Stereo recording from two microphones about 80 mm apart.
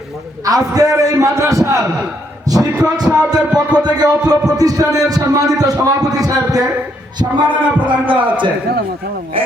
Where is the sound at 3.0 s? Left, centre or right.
Centre.